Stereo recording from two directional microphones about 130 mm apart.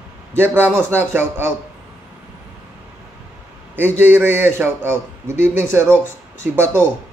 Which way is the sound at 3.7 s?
15° right (ahead or behind).